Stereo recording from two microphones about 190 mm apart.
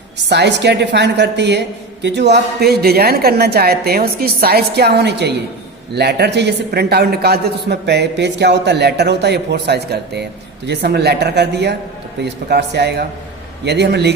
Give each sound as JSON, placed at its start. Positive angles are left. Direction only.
{"t": 0.3, "sound": "a woman's voice", "side_deg": -65}